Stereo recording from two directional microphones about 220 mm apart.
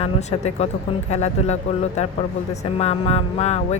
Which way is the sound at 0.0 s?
30° left (ahead or behind).